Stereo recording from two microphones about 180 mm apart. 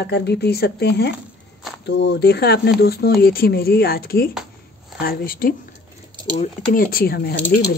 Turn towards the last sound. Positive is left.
turn(degrees=65)  # may be behind; listen again after turning